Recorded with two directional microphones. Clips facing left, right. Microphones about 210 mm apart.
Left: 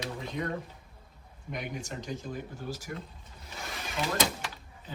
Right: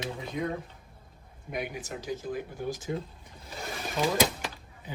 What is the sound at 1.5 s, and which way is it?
Speech, 5° right (ahead or behind).